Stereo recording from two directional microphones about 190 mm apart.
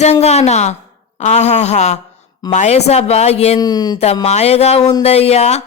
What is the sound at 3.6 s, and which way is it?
Speech, 20° left (ahead or behind).